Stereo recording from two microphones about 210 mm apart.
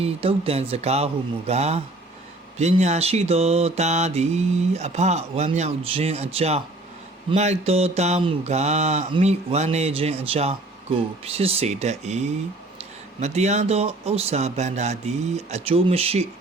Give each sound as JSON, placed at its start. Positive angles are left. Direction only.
{"t": 0.0, "sound": "speech", "side_deg": -25}
{"t": 2.6, "sound": "mantra", "side_deg": -30}